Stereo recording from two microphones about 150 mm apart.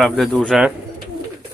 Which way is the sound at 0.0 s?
Centre (ahead or behind).